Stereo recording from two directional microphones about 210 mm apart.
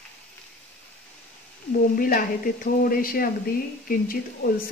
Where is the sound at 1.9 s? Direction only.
40° left (ahead or behind).